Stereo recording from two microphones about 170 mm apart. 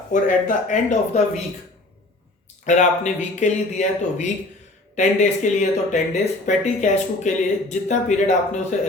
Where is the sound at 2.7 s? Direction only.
45° left (ahead or behind).